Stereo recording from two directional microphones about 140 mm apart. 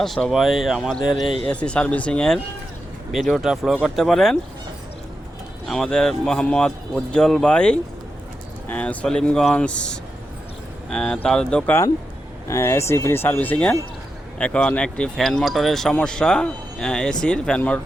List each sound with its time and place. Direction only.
0.0 s speech: centre (ahead or behind)
5.6 s speech: 5° left (ahead or behind)